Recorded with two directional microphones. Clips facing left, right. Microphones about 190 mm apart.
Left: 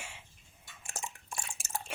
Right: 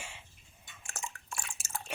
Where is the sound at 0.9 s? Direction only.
15° left (ahead or behind).